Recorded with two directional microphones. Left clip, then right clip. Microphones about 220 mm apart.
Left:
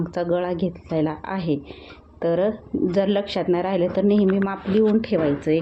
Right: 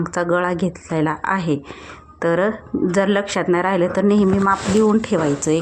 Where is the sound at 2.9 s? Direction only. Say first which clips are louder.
Right 4 dB; 5° left (ahead or behind).